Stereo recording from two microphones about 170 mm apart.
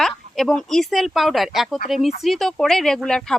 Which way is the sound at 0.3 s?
Centre (ahead or behind).